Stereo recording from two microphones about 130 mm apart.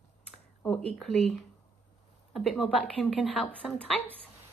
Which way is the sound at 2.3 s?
Centre (ahead or behind).